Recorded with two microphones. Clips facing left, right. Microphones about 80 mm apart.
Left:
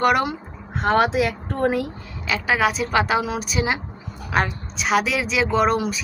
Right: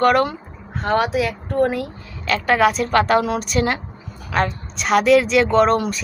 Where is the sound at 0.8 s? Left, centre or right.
Left.